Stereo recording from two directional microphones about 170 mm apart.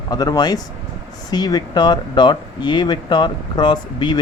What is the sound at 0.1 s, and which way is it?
Speech, 25° left (ahead or behind).